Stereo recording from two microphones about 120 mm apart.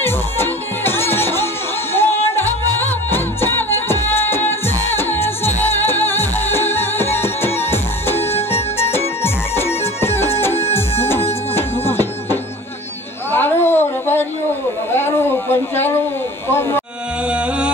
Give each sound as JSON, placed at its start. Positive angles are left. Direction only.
{"t": 0.0, "sound": "music", "side_deg": 20}
{"t": 11.5, "sound": "music", "side_deg": 20}
{"t": 13.3, "sound": "a sound", "side_deg": 20}